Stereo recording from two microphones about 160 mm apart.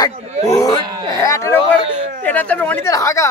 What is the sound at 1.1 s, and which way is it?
Speech, 20° left (ahead or behind).